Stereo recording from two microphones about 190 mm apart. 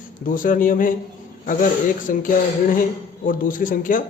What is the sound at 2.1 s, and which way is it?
A man's voice, 45° left (ahead or behind).